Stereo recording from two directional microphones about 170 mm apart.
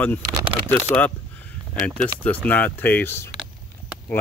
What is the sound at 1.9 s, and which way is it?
Speech, 5° left (ahead or behind).